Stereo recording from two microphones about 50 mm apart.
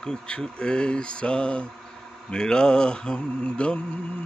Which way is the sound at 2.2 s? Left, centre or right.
Centre.